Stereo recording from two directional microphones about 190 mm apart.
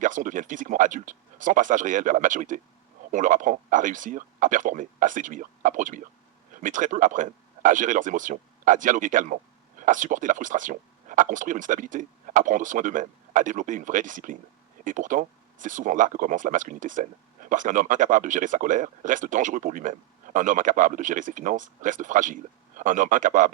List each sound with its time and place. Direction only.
0.0 s speech: 45° right (ahead or behind)